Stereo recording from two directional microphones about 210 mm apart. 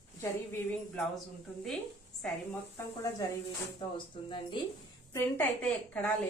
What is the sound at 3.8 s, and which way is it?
Speech, 20° left (ahead or behind).